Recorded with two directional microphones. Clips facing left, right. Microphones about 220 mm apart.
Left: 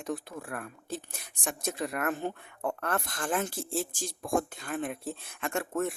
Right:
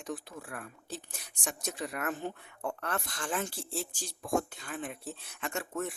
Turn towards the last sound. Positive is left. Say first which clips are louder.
# left 5 dB
turn(degrees=55)  # may be behind; listen again after turning